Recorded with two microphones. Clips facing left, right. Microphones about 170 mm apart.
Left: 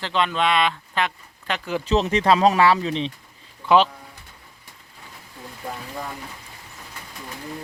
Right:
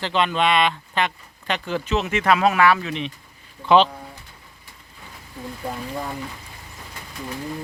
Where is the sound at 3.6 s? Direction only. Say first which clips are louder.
Right 1 dB; 5° left (ahead or behind).